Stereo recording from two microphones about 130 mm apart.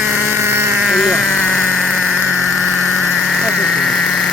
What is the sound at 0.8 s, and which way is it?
Sheep, centre (ahead or behind).